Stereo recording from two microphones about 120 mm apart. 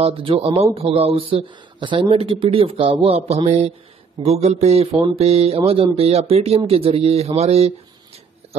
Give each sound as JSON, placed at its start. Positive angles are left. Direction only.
{"t": 0.0, "sound": "speech", "side_deg": -50}